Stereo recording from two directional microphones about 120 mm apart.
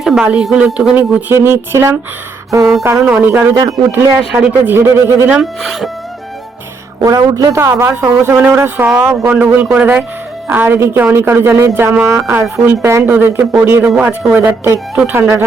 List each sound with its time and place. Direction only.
0.0 s speech: 5° right (ahead or behind)
1.3 s speech: 20° right (ahead or behind)
4.2 s speech: 5° right (ahead or behind)
4.6 s speech: 20° right (ahead or behind)
5.4 s speech: centre (ahead or behind)
7.0 s speech: 30° right (ahead or behind)